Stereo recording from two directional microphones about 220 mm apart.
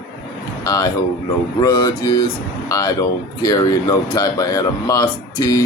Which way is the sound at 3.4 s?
15° left (ahead or behind).